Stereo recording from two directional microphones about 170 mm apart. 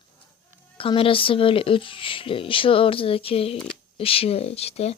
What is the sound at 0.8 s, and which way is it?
Speech, 30° left (ahead or behind).